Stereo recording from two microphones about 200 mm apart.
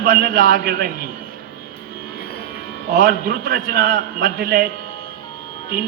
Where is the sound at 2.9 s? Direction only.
45° right (ahead or behind).